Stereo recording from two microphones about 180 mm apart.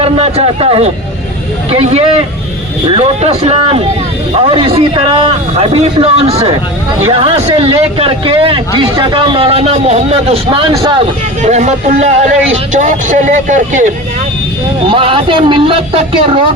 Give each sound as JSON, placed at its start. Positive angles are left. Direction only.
{"t": 0.0, "sound": "speech", "side_deg": -35}
{"t": 11.4, "sound": "speech", "side_deg": -40}
{"t": 14.8, "sound": "speech", "side_deg": -30}